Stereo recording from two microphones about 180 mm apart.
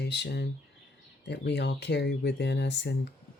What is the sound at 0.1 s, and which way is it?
Speech, 70° left (ahead or behind).